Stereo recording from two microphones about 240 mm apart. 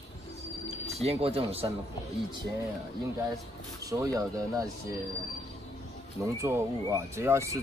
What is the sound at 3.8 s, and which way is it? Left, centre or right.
Speech, centre.